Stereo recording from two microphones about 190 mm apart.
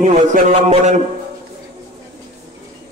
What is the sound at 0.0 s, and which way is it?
Speech, 40° right (ahead or behind).